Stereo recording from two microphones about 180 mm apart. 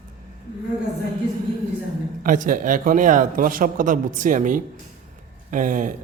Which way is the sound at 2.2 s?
50° right (ahead or behind).